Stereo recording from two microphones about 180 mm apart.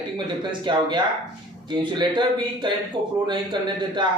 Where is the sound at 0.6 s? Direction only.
25° right (ahead or behind).